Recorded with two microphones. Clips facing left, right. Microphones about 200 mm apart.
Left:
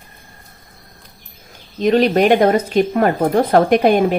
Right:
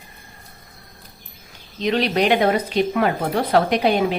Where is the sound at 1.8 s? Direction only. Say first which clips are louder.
Left 6 dB; 45° left (ahead or behind).